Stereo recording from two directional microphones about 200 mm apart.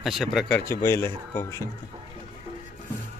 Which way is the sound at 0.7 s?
15° left (ahead or behind).